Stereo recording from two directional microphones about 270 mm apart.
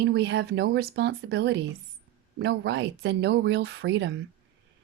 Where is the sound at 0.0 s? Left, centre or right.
Right.